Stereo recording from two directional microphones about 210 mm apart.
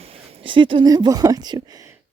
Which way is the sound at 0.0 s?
30° right (ahead or behind).